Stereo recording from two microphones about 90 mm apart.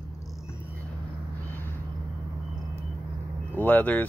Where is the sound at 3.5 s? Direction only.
20° left (ahead or behind).